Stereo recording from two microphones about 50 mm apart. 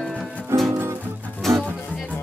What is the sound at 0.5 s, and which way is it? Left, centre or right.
Music, right.